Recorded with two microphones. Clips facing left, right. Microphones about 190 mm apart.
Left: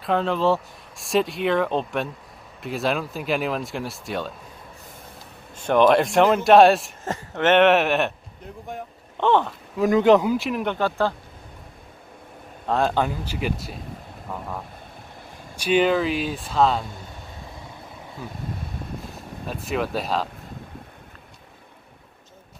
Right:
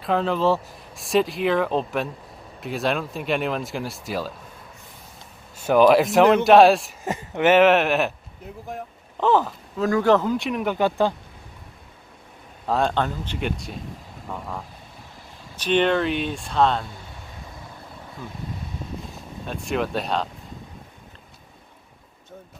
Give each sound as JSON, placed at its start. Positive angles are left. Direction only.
{"t": 0.0, "sound": "speech", "side_deg": 0}
{"t": 5.6, "sound": "speech", "side_deg": -5}
{"t": 7.1, "sound": "speech", "side_deg": -15}
{"t": 9.8, "sound": "speech", "side_deg": 20}
{"t": 10.3, "sound": "speech", "side_deg": 0}
{"t": 10.8, "sound": "speech", "side_deg": -15}
{"t": 12.6, "sound": "speech", "side_deg": 0}
{"t": 15.5, "sound": "speech", "side_deg": 10}
{"t": 19.0, "sound": "speech", "side_deg": 0}